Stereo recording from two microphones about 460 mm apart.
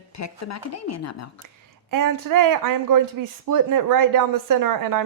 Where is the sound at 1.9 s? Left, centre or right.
Right.